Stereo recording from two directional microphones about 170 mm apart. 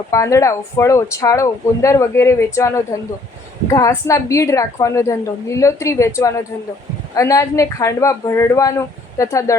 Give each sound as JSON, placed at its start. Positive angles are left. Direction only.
{"t": 0.1, "sound": "speech", "side_deg": 20}